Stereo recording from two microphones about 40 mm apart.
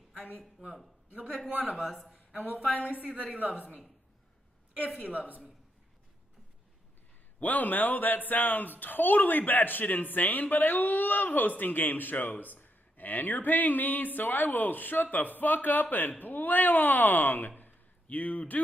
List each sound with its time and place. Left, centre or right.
1.5 s speech: right
1.8 s speech: centre
2.8 s a woman's voice: right
7.3 s speech: left